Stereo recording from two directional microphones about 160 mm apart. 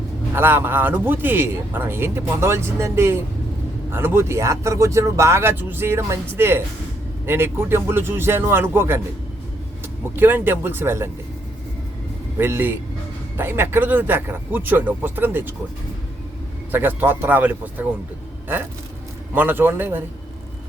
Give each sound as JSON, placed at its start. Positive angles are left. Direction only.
{"t": 0.3, "sound": "a man's voice", "side_deg": -15}
{"t": 10.2, "sound": "a man's voice", "side_deg": -15}
{"t": 12.4, "sound": "a man's voice", "side_deg": -15}
{"t": 16.7, "sound": "a man's voice", "side_deg": -10}
{"t": 19.3, "sound": "a man's voice", "side_deg": -10}